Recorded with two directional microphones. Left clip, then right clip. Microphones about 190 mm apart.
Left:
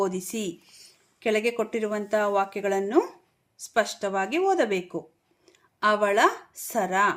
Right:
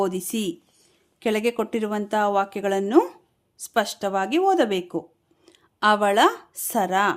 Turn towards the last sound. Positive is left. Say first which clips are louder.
# right 2 dB
turn(degrees=-45)  # may be behind; listen again after turning